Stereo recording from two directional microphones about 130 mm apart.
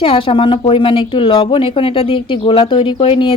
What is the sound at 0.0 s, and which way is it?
Speech, 45° left (ahead or behind).